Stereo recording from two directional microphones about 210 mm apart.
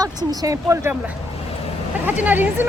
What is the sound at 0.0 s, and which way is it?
Speech, 20° right (ahead or behind).